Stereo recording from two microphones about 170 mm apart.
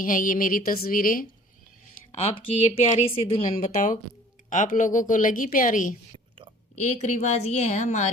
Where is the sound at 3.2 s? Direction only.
45° left (ahead or behind).